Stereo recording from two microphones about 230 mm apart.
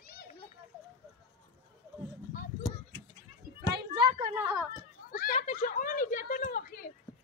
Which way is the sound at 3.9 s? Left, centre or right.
Centre.